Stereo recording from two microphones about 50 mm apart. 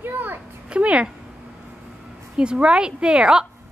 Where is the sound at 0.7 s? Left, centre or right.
Right.